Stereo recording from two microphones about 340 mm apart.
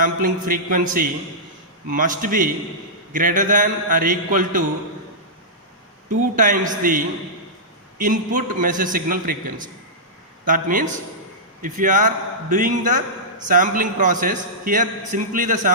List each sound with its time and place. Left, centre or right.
0.0 s a man's voice: right
6.3 s a man's voice: right